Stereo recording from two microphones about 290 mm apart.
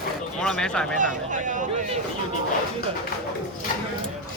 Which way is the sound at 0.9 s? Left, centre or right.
Right.